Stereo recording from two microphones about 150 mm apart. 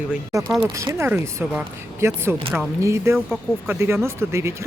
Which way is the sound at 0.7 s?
20° right (ahead or behind).